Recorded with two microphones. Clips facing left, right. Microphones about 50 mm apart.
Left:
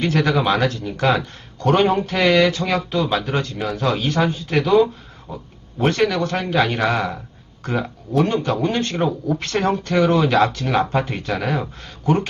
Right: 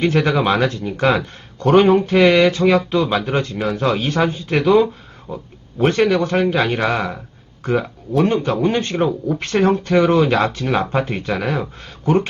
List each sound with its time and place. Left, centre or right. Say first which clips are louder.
0.0 s a man's voice: right 2 dB; centre
0.7 s a man's voice: right 2 dB; right; by 7.9 s centre
8.2 s a man's voice: right 3 dB; right
12.0 s speech: right 2 dB; right